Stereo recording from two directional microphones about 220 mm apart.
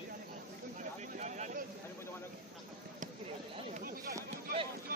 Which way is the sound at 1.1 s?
30° right (ahead or behind).